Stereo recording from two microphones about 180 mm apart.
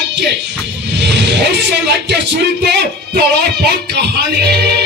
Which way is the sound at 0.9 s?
75° right (ahead or behind).